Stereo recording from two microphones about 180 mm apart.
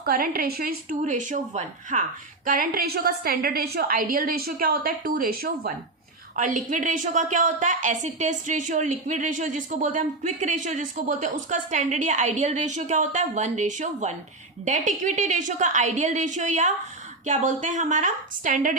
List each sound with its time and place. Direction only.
0.0 s a woman's voice: 55° right (ahead or behind)